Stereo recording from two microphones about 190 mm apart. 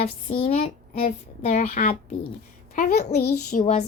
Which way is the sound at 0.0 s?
30° left (ahead or behind).